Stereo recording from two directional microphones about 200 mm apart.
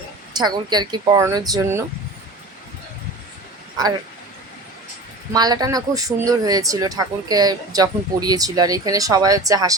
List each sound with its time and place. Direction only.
0.3 s speech: 20° right (ahead or behind)
5.3 s speech: 20° right (ahead or behind)